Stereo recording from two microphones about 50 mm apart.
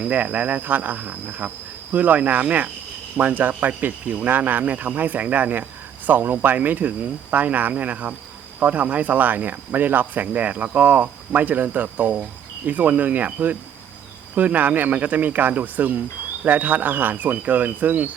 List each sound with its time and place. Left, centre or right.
0.0 s speech: right